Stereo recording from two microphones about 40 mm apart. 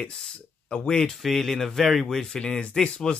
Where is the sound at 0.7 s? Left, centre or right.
Left.